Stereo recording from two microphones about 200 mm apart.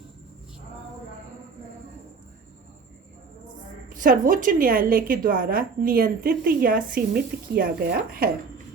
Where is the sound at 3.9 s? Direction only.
40° right (ahead or behind).